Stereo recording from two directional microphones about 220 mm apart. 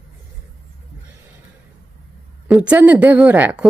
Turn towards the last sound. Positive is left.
turn(degrees=-10)  # may be behind; listen again after turning